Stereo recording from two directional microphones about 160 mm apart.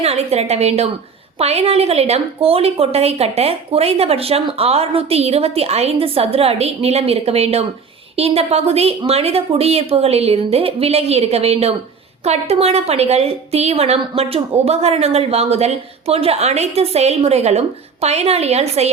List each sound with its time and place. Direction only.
0.0 s a woman's voice: 40° right (ahead or behind)